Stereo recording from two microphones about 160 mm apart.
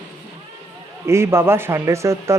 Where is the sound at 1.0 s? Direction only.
15° right (ahead or behind).